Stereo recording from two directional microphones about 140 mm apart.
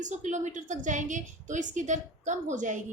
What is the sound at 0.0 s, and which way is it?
A woman's voice, 60° right (ahead or behind).